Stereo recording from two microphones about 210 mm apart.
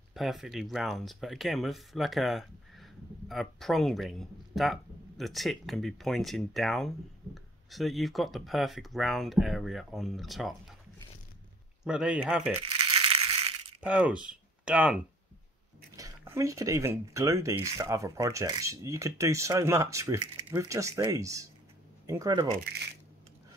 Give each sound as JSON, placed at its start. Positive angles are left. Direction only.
{"t": 0.1, "sound": "speech", "side_deg": 0}
{"t": 11.8, "sound": "speech", "side_deg": -5}
{"t": 12.6, "sound": "crushing", "side_deg": -25}
{"t": 13.7, "sound": "speech", "side_deg": -5}